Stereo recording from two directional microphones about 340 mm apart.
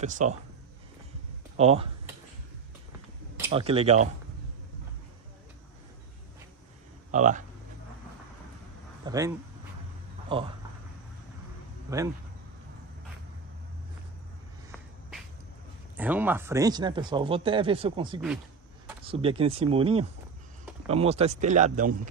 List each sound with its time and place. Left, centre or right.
0.0 s speech: right
1.6 s speech: centre
3.5 s speech: centre
7.1 s speech: right
9.0 s speech: centre
10.3 s speech: centre
11.9 s speech: centre
16.0 s speech: centre; by 22.1 s right